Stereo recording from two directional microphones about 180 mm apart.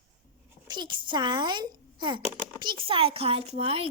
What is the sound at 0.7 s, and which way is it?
Speech, 25° right (ahead or behind).